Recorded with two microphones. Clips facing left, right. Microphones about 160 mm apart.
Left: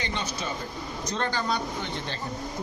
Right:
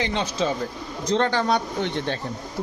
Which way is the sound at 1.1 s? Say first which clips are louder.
Right 8 dB; 70° right (ahead or behind).